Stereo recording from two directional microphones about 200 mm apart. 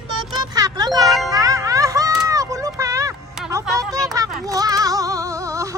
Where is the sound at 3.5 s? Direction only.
15° right (ahead or behind).